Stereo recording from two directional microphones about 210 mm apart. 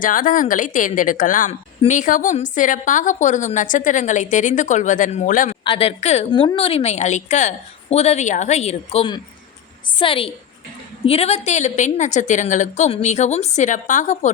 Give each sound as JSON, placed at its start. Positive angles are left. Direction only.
{"t": 0.0, "sound": "a woman's voice", "side_deg": 40}
{"t": 5.6, "sound": "a woman's voice", "side_deg": 25}